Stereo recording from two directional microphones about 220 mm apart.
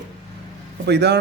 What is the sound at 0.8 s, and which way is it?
Speech, 50° right (ahead or behind).